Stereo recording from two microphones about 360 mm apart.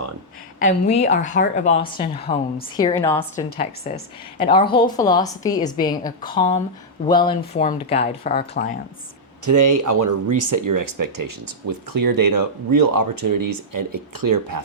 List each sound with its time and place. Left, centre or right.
0.6 s a woman's voice: centre
9.4 s speech: right